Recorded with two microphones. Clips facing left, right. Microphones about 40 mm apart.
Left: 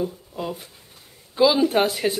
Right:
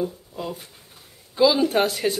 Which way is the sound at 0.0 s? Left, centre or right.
Centre.